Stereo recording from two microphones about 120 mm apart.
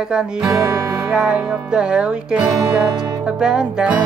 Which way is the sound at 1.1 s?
10° right (ahead or behind).